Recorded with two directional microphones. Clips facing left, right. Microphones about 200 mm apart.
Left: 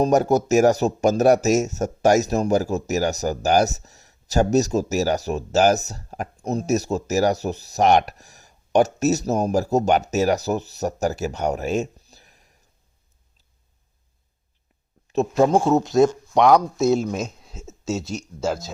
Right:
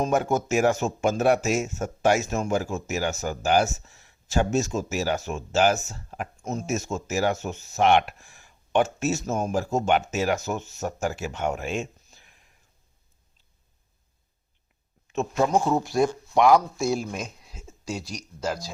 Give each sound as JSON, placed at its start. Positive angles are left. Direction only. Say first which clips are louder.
{"t": 0.0, "sound": "speech", "louder": "left 6 dB", "side_deg": 40}
{"t": 15.1, "sound": "speech", "louder": "left 5 dB", "side_deg": 35}